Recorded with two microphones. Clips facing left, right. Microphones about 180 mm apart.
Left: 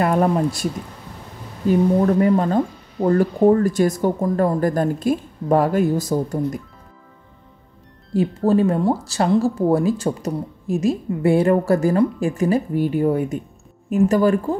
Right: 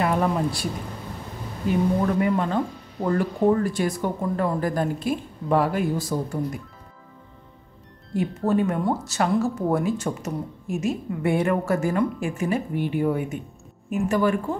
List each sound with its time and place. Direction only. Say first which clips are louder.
0.0 s speech: left 5 dB; 45° left (ahead or behind)
2.1 s speech: left 5 dB; 40° left (ahead or behind)
8.1 s speech: left 5 dB; 30° left (ahead or behind)